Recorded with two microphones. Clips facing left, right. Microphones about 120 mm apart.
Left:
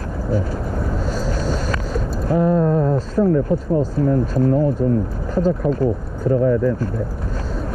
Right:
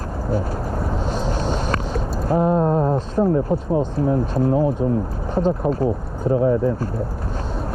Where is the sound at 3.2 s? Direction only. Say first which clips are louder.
Left 2 dB; 20° right (ahead or behind).